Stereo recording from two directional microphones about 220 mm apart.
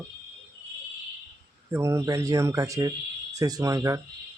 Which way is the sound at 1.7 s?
10° right (ahead or behind).